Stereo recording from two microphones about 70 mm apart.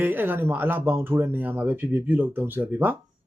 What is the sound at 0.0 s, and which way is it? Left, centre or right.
Speech, right.